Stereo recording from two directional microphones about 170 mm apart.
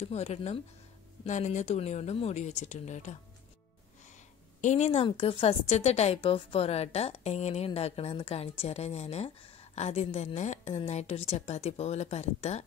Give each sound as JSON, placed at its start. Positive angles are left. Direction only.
{"t": 0.0, "sound": "a woman's voice", "side_deg": 40}
{"t": 4.6, "sound": "a woman's voice", "side_deg": 45}